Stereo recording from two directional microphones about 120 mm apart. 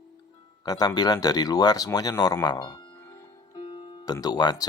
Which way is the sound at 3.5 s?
40° left (ahead or behind).